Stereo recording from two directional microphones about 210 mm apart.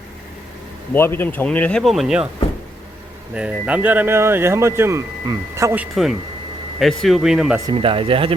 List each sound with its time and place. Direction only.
0.9 s speech: 10° left (ahead or behind)
3.3 s speech: 5° right (ahead or behind)
7.7 s speech: 25° right (ahead or behind)